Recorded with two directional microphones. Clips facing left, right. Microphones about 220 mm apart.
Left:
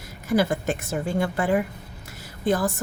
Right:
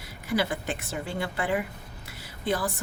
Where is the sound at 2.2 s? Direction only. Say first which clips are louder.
Left 5 dB; 45° left (ahead or behind).